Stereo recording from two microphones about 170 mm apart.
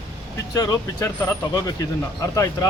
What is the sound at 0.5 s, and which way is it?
Speech, 20° left (ahead or behind).